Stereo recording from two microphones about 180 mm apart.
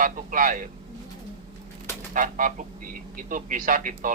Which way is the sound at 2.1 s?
45° right (ahead or behind).